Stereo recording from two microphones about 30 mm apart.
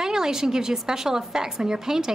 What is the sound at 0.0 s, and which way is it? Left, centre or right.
A woman's voice, centre.